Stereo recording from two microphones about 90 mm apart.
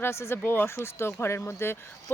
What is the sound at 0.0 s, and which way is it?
Speech, 30° left (ahead or behind).